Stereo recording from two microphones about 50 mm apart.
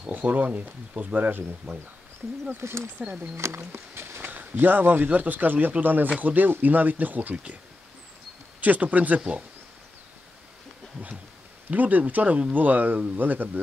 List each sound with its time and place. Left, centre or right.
0.0 s speech: right
2.5 s speech: right
3.0 s speech: centre
3.3 s music: right
4.3 s speech: right
8.5 s speech: right
11.7 s speech: right